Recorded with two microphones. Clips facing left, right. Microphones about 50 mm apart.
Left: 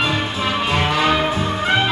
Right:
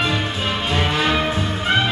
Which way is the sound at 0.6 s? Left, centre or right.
Left.